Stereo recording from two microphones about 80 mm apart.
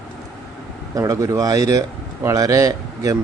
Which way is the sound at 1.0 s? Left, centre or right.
Right.